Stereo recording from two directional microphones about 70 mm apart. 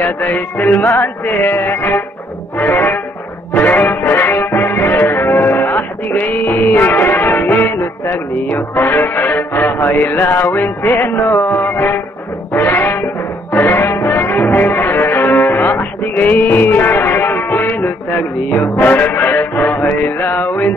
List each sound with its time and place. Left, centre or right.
0.0 s music: left